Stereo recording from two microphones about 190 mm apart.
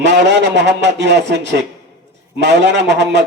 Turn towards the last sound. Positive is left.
turn(degrees=-65)  # may be behind; listen again after turning